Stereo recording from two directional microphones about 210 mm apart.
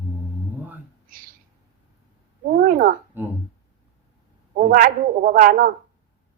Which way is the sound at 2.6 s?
40° right (ahead or behind).